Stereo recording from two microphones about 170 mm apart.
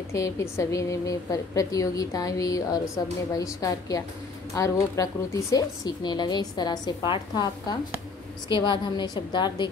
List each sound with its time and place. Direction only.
0.1 s a woman's voice: 15° left (ahead or behind)